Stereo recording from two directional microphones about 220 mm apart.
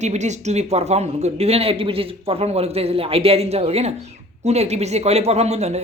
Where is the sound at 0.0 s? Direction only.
30° right (ahead or behind).